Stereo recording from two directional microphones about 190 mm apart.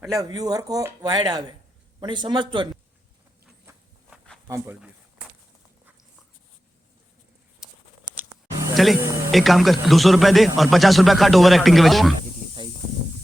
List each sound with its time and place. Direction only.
0.1 s speech: 20° right (ahead or behind)
4.4 s speech: 15° right (ahead or behind)
8.1 s a sound: 10° right (ahead or behind)
9.3 s speech: centre (ahead or behind)